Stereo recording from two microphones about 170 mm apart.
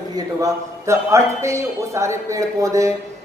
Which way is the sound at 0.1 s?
20° right (ahead or behind).